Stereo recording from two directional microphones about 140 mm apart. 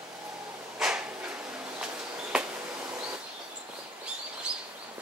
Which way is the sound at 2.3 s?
5° right (ahead or behind).